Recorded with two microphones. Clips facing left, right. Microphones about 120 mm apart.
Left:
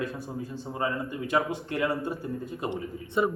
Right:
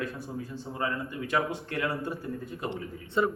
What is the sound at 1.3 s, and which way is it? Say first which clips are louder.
A man's voice: left 2 dB; 20° left (ahead or behind).